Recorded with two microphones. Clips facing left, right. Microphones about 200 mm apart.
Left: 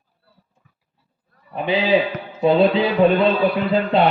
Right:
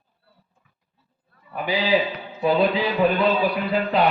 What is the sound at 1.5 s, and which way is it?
A man's voice, 25° left (ahead or behind).